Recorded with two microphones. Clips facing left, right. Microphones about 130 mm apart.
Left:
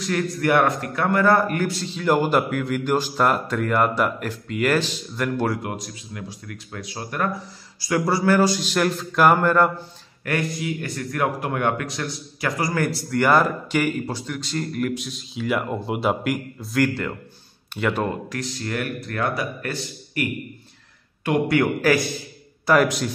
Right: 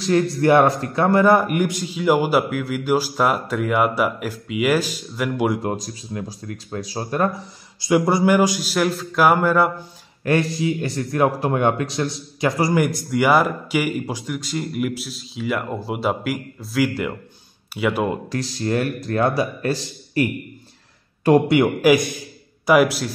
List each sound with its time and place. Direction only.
0.0 s a man's voice: 30° right (ahead or behind); by 5.5 s 10° right (ahead or behind)
5.6 s speech: 30° right (ahead or behind)
7.8 s a man's voice: 20° right (ahead or behind); by 9.7 s 5° right (ahead or behind)
10.2 s a man's voice: 25° right (ahead or behind)
12.7 s a man's voice: 15° right (ahead or behind)
18.3 s a man's voice: 30° right (ahead or behind)
21.5 s a man's voice: 20° right (ahead or behind)